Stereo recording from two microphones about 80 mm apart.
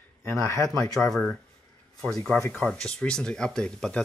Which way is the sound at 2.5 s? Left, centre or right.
Centre.